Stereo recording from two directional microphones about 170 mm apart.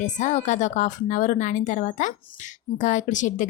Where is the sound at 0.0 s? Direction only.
45° left (ahead or behind).